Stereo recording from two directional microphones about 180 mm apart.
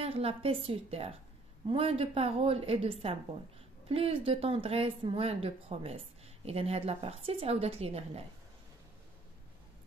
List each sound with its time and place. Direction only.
0.0 s speech: 35° right (ahead or behind)